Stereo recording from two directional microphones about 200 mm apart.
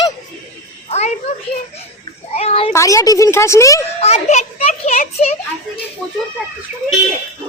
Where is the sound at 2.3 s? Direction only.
30° left (ahead or behind).